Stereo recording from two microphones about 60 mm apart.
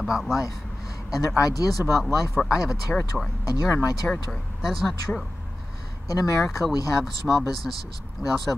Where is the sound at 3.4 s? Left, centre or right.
Left.